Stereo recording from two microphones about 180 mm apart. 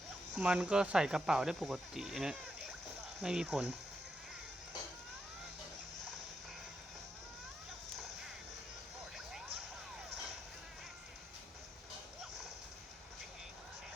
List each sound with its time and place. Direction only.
0.3 s speech: centre (ahead or behind)